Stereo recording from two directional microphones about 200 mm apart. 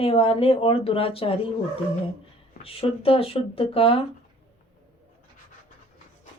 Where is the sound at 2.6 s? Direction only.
30° left (ahead or behind).